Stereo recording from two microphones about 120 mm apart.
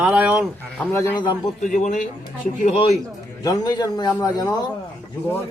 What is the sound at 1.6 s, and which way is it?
Speech, 90° left.